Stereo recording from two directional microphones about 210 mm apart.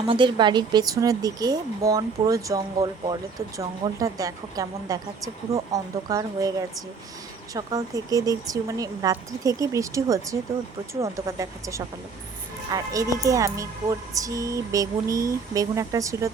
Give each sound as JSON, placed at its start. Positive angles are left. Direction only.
{"t": 0.0, "sound": "speech", "side_deg": -20}